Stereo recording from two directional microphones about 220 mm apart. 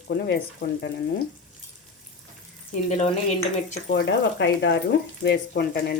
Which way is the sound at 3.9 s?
50° left (ahead or behind).